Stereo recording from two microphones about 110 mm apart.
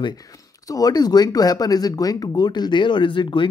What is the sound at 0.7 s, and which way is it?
Speech, 35° left (ahead or behind).